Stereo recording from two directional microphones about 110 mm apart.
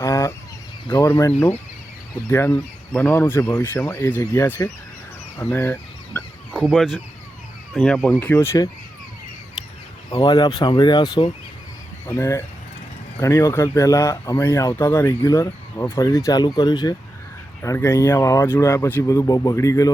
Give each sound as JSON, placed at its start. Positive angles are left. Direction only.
{"t": 0.0, "sound": "fowl", "side_deg": 30}
{"t": 1.0, "sound": "speech", "side_deg": 25}
{"t": 6.5, "sound": "speech", "side_deg": -10}
{"t": 7.8, "sound": "speech", "side_deg": 10}
{"t": 8.2, "sound": "speech", "side_deg": 20}
{"t": 9.6, "sound": "a sound", "side_deg": 40}
{"t": 10.1, "sound": "speech", "side_deg": 35}
{"t": 12.0, "sound": "speech", "side_deg": 25}
{"t": 17.6, "sound": "speech", "side_deg": 25}